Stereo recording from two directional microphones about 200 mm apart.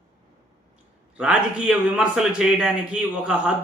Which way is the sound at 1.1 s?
5° right (ahead or behind).